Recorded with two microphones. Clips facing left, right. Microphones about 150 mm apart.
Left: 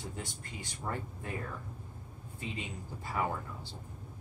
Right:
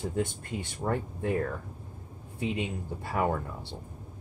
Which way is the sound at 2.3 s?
65° right (ahead or behind).